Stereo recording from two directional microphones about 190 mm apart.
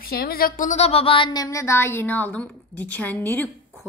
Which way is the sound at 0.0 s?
50° left (ahead or behind).